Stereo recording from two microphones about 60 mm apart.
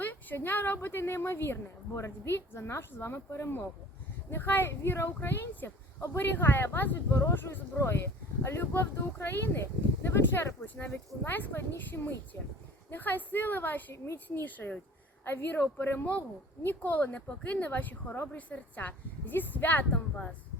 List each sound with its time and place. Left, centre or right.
0.0 s a woman's voice: left